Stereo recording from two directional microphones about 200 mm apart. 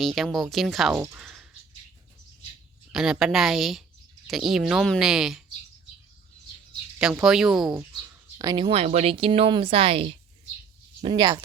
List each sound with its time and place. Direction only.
0.0 s a woman's voice: centre (ahead or behind)
1.2 s music: centre (ahead or behind)
2.9 s a woman's voice: centre (ahead or behind)
7.0 s a woman's voice: 5° right (ahead or behind)
8.4 s a woman's voice: 20° right (ahead or behind)